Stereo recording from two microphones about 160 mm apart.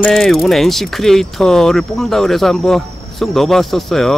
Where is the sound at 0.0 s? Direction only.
Centre (ahead or behind).